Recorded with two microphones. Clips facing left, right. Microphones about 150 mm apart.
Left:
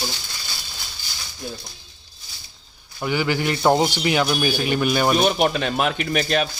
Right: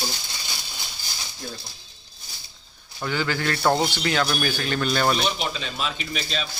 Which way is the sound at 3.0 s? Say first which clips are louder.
Left 4 dB; 15° left (ahead or behind).